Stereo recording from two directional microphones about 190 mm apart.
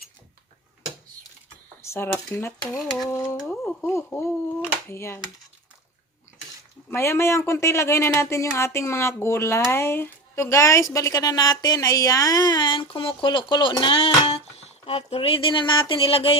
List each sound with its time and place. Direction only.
1.8 s speech: 15° left (ahead or behind)
3.1 s speech: 15° left (ahead or behind)
3.3 s speech: centre (ahead or behind)
6.9 s speech: 15° left (ahead or behind); by 16.4 s 30° left (ahead or behind)